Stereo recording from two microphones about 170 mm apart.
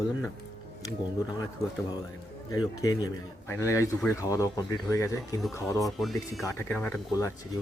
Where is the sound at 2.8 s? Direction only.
20° left (ahead or behind).